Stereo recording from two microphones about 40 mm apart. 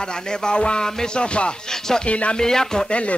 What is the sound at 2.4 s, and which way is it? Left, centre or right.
Music, centre.